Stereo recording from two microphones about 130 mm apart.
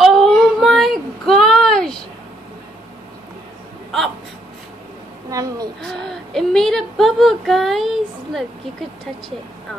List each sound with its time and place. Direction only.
0.0 s child singing: centre (ahead or behind)
5.3 s a sound: 25° right (ahead or behind)
5.8 s speech: 5° left (ahead or behind)